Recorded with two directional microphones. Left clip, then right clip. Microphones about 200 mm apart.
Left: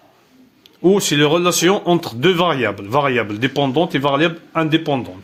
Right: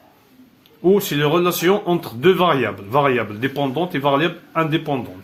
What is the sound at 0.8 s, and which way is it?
Speech, 40° left (ahead or behind).